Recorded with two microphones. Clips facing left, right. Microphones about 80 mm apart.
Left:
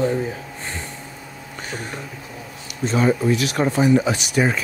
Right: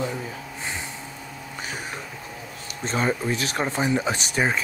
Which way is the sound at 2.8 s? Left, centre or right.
Right.